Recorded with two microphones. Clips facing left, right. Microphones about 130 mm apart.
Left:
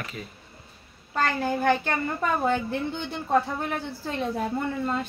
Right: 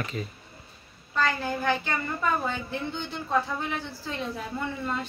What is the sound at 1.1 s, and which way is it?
A woman's voice, 55° left (ahead or behind).